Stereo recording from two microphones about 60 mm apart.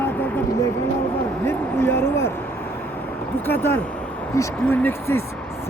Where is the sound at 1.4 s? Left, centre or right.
Left.